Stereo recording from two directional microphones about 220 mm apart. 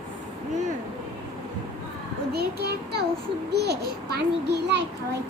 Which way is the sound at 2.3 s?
45° right (ahead or behind).